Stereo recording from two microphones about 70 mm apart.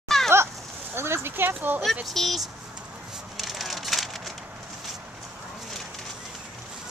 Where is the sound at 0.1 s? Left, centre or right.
Centre.